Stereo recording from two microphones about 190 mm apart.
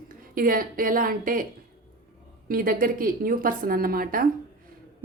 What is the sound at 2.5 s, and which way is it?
A woman's voice, 50° right (ahead or behind).